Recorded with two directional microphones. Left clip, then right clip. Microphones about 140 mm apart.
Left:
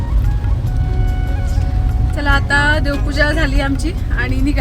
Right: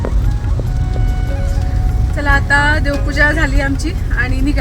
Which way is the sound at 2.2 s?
5° right (ahead or behind).